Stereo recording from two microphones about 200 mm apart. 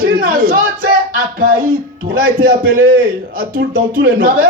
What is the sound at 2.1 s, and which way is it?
A man's voice, 45° right (ahead or behind).